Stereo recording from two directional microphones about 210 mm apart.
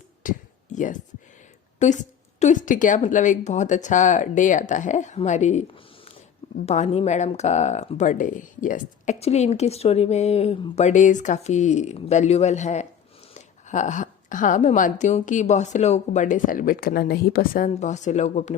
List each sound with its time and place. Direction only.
0.2 s a sound: 40° left (ahead or behind)
1.8 s speech: 35° left (ahead or behind)
6.7 s speech: 30° left (ahead or behind)